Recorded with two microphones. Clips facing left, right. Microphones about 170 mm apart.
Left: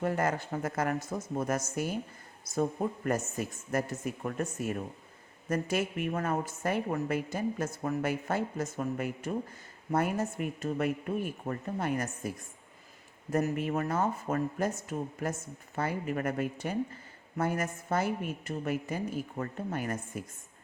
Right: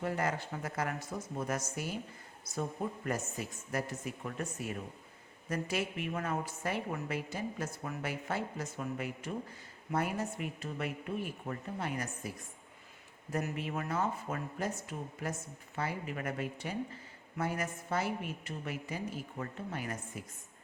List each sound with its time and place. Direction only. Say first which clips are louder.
0.0 s speech: left 4 dB; 45° left (ahead or behind)
13.3 s speech: left 7 dB; 45° left (ahead or behind)